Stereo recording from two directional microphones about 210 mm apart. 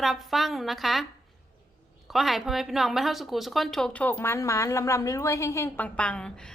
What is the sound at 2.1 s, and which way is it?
A woman's voice, centre (ahead or behind).